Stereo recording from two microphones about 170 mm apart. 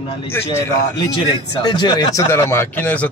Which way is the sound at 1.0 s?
25° left (ahead or behind).